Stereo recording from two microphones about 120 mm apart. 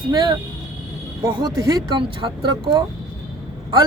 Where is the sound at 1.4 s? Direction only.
35° right (ahead or behind).